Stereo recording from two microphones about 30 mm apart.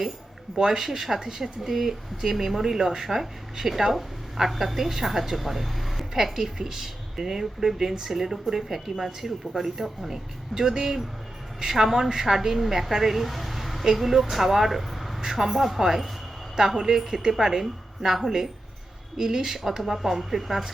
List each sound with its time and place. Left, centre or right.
0.5 s speech: centre
0.9 s speech: centre
6.3 s speech: centre
10.1 s speech: centre
15.2 s speech: centre
15.4 s speech: centre